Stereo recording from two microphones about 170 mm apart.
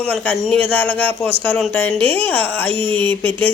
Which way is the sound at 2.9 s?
10° left (ahead or behind).